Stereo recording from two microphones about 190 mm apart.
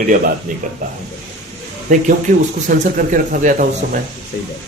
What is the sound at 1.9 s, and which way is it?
Speech, 40° right (ahead or behind).